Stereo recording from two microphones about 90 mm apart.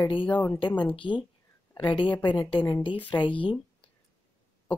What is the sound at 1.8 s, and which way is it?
Speech, 60° left (ahead or behind).